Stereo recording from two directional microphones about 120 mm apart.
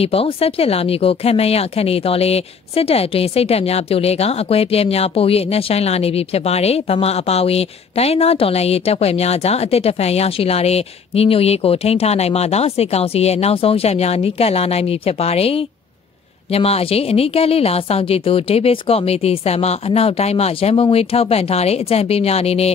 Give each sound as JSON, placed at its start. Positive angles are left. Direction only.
{"t": 0.0, "sound": "speech", "side_deg": 55}